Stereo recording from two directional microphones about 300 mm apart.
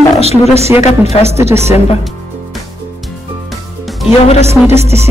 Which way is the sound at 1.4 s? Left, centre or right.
Right.